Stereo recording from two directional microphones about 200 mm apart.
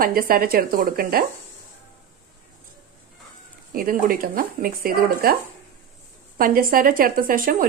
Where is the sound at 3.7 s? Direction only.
45° right (ahead or behind).